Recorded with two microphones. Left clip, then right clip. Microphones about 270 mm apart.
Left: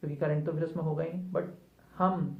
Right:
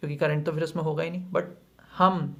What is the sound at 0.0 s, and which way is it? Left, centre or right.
Speech, right.